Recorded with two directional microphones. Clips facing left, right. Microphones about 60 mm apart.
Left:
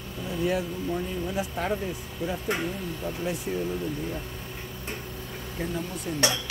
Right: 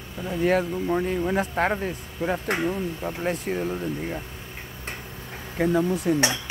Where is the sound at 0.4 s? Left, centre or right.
Right.